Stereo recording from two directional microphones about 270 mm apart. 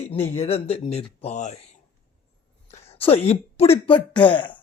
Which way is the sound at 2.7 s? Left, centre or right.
Left.